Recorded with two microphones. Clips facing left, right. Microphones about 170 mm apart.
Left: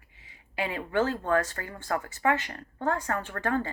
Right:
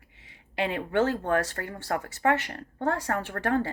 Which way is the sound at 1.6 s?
45° right (ahead or behind).